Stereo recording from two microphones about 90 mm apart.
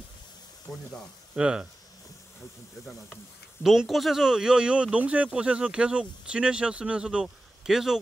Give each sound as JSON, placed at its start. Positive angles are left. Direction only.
{"t": 0.7, "sound": "speech", "side_deg": 40}
{"t": 1.3, "sound": "speech", "side_deg": -10}
{"t": 3.6, "sound": "speech", "side_deg": -5}